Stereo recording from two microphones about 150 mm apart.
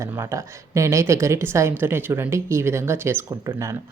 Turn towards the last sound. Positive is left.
turn(degrees=-20)  # may be behind; listen again after turning